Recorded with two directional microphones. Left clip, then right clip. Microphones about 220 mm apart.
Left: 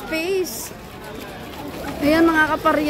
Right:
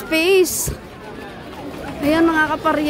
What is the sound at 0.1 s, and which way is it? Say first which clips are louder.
Speech: right 8 dB; 40° right (ahead or behind).